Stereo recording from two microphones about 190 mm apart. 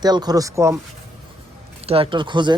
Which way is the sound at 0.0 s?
20° right (ahead or behind).